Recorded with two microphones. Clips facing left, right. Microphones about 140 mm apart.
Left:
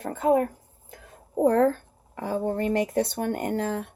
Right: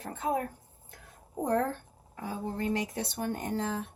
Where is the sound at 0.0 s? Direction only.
60° left (ahead or behind).